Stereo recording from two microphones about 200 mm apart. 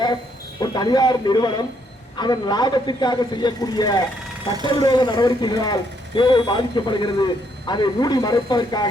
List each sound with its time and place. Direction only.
0.6 s speech: 20° left (ahead or behind)